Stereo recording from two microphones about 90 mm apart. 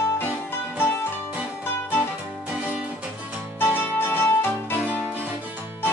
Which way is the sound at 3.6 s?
25° left (ahead or behind).